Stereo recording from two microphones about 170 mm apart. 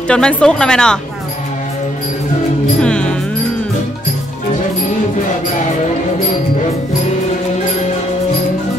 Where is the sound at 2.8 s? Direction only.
5° left (ahead or behind).